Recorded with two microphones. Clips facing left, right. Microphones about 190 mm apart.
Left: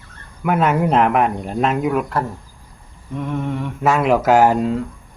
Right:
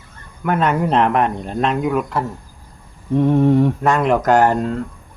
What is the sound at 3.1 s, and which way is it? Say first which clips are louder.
Mantra: right 10 dB; 35° right (ahead or behind).